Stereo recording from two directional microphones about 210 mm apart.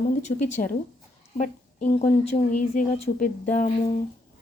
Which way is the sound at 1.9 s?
30° left (ahead or behind).